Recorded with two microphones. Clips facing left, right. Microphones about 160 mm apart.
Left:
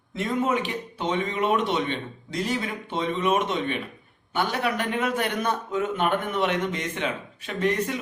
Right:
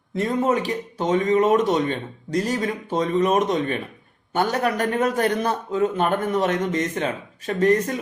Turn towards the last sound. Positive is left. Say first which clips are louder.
# right 6 dB
turn(degrees=-40)  # may be behind; listen again after turning